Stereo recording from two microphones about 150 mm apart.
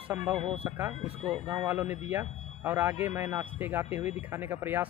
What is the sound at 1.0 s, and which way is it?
Speech, 35° right (ahead or behind).